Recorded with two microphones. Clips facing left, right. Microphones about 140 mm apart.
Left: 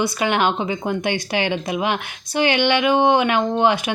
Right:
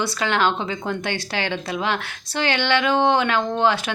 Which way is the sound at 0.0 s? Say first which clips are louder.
Left 2 dB; 15° left (ahead or behind).